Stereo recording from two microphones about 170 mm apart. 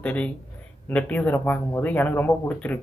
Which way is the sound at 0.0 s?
10° left (ahead or behind).